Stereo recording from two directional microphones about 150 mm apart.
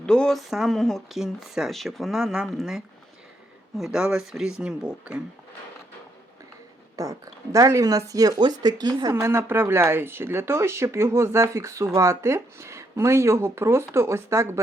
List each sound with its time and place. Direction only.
0.0 s speech: 5° left (ahead or behind)
6.9 s speech: 25° right (ahead or behind)